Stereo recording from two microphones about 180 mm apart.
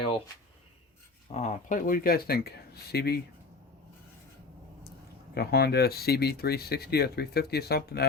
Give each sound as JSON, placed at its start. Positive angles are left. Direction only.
{"t": 1.3, "sound": "speech", "side_deg": 40}
{"t": 5.3, "sound": "speech", "side_deg": 60}